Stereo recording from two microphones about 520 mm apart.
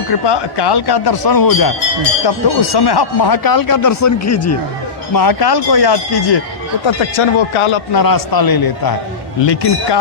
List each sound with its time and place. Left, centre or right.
0.1 s speech: left
5.1 s speech: left
6.8 s speech: left
7.9 s speech: left